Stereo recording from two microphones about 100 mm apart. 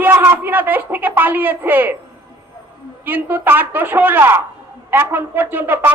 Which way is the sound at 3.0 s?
20° right (ahead or behind).